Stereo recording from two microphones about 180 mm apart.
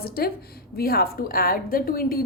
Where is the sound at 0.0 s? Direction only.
55° left (ahead or behind).